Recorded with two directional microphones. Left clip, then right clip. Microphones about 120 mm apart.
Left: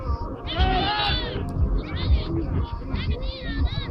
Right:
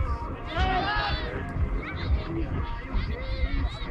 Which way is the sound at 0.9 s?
40° right (ahead or behind).